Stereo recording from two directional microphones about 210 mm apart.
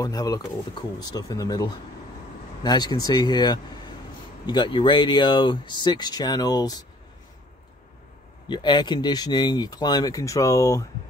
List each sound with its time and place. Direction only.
0.0 s speech: 15° left (ahead or behind)
8.5 s speech: 20° left (ahead or behind)